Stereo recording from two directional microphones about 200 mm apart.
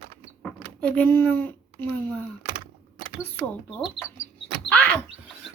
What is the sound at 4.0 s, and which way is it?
Speech, 25° left (ahead or behind).